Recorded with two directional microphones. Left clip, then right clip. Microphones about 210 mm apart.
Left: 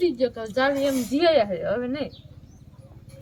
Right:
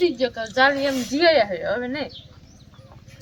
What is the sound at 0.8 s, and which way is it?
Speech, 25° left (ahead or behind).